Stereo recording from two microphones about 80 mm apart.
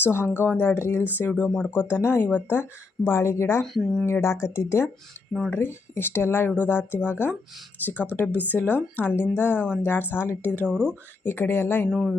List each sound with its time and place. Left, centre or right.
0.0 s speech: left
3.6 s speech: centre
4.0 s speech: left
10.7 s speech: centre
11.2 s speech: left
11.9 s speech: centre